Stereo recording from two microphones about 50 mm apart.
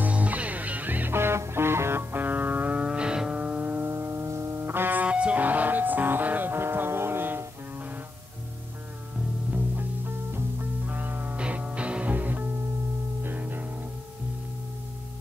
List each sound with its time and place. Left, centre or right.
0.0 s music: right
1.1 s music: right
2.1 s music: right; by 3.3 s centre
3.3 s music: right
3.8 s music: right
4.6 s music: right
5.0 s music: right
9.5 s music: right
11.3 s music: right